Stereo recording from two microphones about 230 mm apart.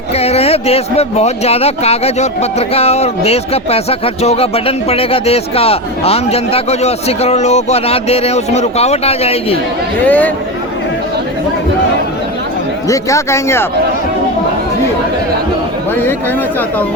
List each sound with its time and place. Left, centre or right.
0.1 s speech: left
10.1 s speech: centre
12.9 s speech: centre